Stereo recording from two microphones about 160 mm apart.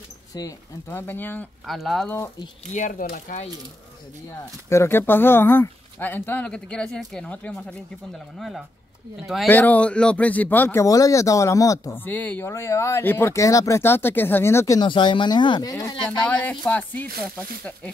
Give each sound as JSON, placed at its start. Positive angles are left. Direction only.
{"t": 0.3, "sound": "speech", "side_deg": 20}
{"t": 1.7, "sound": "speech", "side_deg": 0}
{"t": 2.7, "sound": "speech", "side_deg": 55}
{"t": 4.6, "sound": "speech", "side_deg": 15}
{"t": 14.8, "sound": "speech", "side_deg": 30}
{"t": 16.1, "sound": "speech", "side_deg": 10}